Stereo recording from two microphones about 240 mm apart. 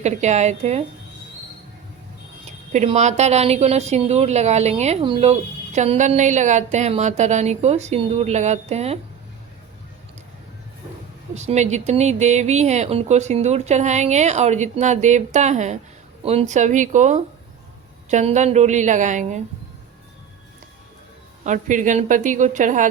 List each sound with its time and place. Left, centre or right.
0.0 s a woman's voice: right
2.7 s a woman's voice: right
11.3 s a woman's voice: right
21.4 s a woman's voice: right